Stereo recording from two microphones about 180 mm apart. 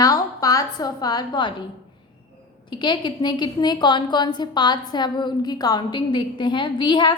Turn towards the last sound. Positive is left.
turn(degrees=25)  # may be behind; listen again after turning